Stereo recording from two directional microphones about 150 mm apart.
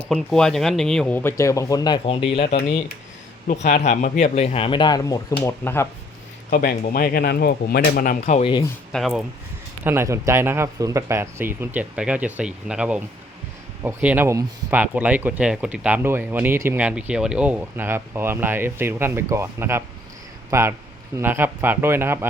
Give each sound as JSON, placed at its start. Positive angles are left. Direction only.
{"t": 0.1, "sound": "speech", "side_deg": 5}
{"t": 3.4, "sound": "speech", "side_deg": 50}
{"t": 6.5, "sound": "speech", "side_deg": 80}
{"t": 8.4, "sound": "speech", "side_deg": 35}
{"t": 8.9, "sound": "speech", "side_deg": 0}
{"t": 9.8, "sound": "speech", "side_deg": -15}